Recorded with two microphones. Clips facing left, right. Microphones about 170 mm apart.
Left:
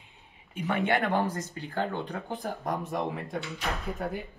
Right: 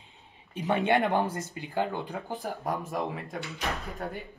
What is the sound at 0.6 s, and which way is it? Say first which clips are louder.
Speech: right 2 dB; 20° right (ahead or behind).